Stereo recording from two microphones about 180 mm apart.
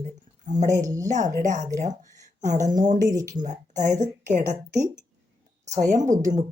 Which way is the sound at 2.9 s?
20° right (ahead or behind).